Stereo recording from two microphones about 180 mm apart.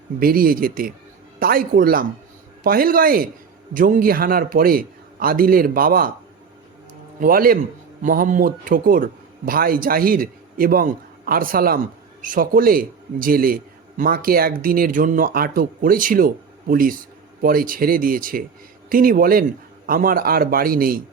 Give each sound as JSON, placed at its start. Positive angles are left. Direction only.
{"t": 0.2, "sound": "a man's voice", "side_deg": -55}
{"t": 7.2, "sound": "a man's voice", "side_deg": -55}